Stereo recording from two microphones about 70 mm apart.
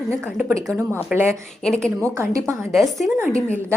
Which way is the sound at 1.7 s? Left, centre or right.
Centre.